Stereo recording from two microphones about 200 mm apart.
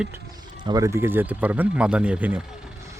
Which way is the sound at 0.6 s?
20° right (ahead or behind).